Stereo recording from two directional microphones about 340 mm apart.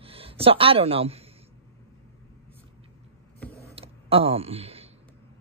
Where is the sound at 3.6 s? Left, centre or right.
Centre.